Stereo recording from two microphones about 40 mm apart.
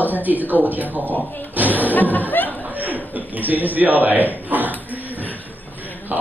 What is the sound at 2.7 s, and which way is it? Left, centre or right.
Speech, right.